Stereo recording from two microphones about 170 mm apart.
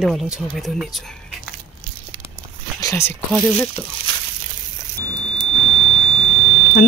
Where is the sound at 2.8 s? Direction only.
15° left (ahead or behind).